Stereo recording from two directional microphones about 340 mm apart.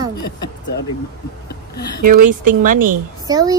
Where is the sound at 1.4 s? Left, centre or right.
Left.